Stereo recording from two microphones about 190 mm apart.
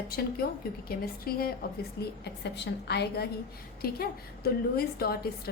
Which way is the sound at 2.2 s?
65° left (ahead or behind).